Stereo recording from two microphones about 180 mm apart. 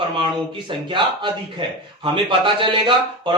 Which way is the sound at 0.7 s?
25° right (ahead or behind).